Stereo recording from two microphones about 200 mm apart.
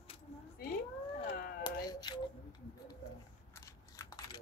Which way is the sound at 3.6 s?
15° left (ahead or behind).